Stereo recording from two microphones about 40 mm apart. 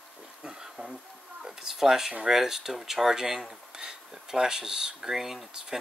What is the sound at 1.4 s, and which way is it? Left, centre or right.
Speech, centre.